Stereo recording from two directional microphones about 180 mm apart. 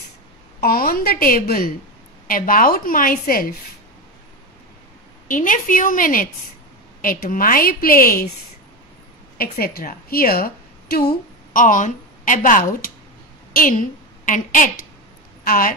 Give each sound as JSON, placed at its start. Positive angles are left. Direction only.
{"t": 0.6, "sound": "a woman's voice", "side_deg": 55}
{"t": 5.3, "sound": "a woman's voice", "side_deg": 50}
{"t": 9.4, "sound": "a woman's voice", "side_deg": 55}